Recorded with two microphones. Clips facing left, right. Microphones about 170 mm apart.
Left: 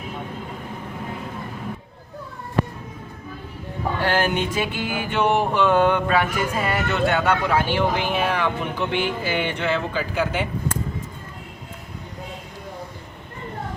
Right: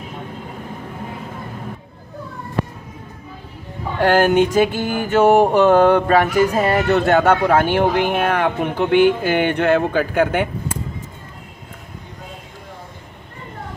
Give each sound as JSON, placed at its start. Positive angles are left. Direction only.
{"t": 4.0, "sound": "mantra", "side_deg": -45}